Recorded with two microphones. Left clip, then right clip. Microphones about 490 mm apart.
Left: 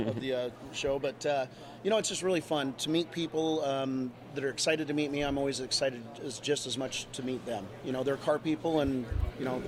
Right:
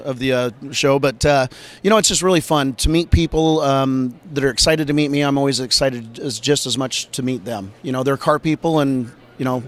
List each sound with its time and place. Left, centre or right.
0.2 s a man's voice: right